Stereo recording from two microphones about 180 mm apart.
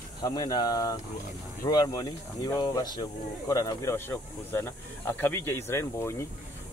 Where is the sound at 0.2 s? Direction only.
20° left (ahead or behind).